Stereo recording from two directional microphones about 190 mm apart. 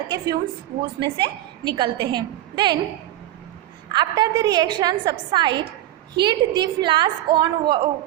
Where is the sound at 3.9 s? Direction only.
20° right (ahead or behind).